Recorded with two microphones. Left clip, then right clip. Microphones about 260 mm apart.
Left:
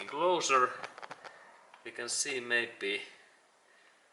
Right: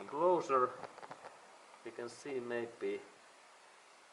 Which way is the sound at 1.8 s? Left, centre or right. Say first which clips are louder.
Left 9 dB; centre.